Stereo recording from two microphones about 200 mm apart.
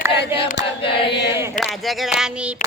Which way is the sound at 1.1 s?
60° left (ahead or behind).